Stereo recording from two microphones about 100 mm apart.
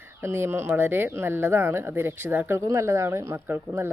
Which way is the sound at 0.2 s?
25° right (ahead or behind).